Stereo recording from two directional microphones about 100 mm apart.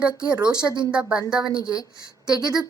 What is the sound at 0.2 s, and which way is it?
Speech, 45° right (ahead or behind).